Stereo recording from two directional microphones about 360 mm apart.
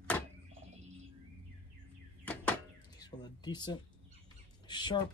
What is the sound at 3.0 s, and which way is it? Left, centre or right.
Speech, centre.